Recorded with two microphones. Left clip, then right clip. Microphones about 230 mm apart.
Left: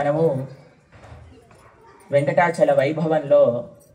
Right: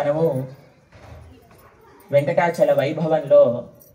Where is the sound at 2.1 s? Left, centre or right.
Left.